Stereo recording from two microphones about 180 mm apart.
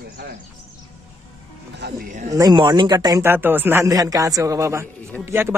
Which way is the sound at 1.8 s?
50° right (ahead or behind).